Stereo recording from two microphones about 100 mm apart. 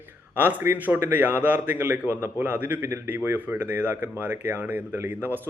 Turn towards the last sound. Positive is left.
turn(degrees=-20)  # may be behind; listen again after turning